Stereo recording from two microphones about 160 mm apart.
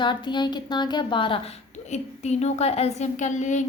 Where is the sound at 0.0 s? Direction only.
30° left (ahead or behind).